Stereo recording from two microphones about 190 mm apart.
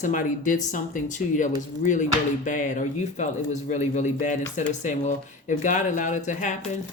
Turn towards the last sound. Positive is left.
turn(degrees=40)  # may be behind; listen again after turning